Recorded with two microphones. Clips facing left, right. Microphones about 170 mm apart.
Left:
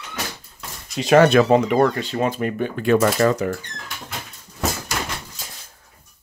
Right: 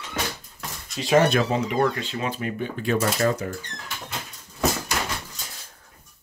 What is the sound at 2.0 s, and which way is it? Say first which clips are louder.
Speech: left 7 dB; 40° left (ahead or behind).